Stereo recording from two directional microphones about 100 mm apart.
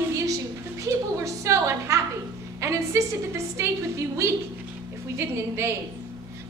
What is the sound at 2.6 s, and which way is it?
A woman's voice, 30° right (ahead or behind).